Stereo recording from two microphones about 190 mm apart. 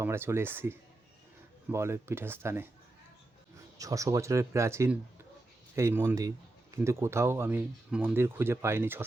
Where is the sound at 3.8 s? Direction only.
15° right (ahead or behind).